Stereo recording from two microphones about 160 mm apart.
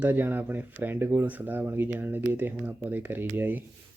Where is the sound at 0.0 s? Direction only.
10° right (ahead or behind).